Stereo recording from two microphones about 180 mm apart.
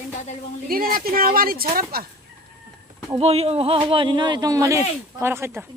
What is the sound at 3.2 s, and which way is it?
Speech, 35° right (ahead or behind).